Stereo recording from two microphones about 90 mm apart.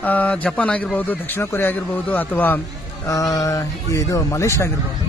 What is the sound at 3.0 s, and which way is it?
A man's voice, 40° left (ahead or behind).